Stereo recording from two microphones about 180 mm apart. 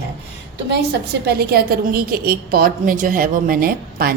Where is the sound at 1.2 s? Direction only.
60° right (ahead or behind).